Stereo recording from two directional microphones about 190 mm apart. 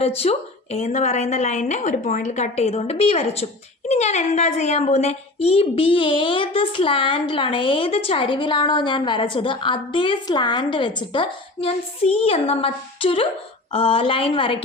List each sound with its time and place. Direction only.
0.2 s a woman's voice: 35° left (ahead or behind)